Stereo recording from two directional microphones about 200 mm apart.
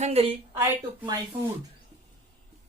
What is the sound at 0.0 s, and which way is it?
Speech, 30° right (ahead or behind).